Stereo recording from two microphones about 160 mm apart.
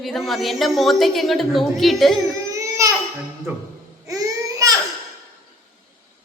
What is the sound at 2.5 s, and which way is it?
Baby cry, 20° right (ahead or behind).